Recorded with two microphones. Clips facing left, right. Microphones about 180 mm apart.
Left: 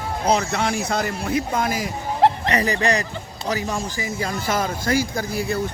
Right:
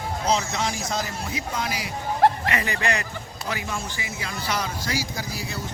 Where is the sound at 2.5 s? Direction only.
35° left (ahead or behind).